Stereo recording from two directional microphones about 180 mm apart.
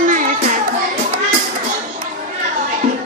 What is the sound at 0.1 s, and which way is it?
Child singing, 45° right (ahead or behind).